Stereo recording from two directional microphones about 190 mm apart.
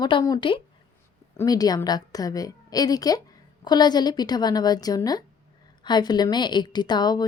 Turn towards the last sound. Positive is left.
turn(degrees=20)  # may be behind; listen again after turning